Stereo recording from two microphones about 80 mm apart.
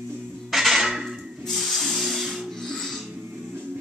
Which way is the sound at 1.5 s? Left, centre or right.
Centre.